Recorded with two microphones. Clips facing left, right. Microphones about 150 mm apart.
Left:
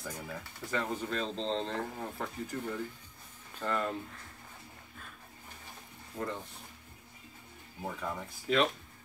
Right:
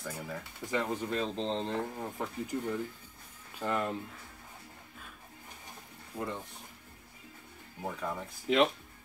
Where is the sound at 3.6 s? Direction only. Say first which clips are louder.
Right 1 dB; 15° right (ahead or behind).